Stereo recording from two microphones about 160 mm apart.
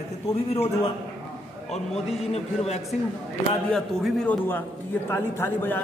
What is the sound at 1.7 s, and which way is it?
A man's voice, 40° left (ahead or behind).